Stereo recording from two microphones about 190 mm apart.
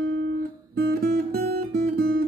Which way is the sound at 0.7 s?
55° right (ahead or behind).